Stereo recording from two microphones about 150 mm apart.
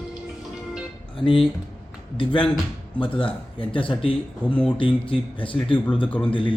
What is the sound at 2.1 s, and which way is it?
Speech, 35° left (ahead or behind).